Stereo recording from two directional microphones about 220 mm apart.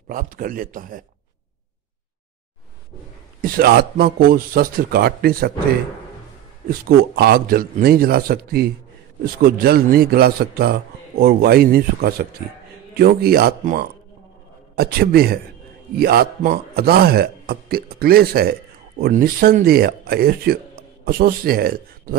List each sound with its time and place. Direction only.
0.1 s speech: 40° right (ahead or behind)
3.4 s a man's voice: 45° right (ahead or behind)
6.7 s a man's voice: 45° right (ahead or behind)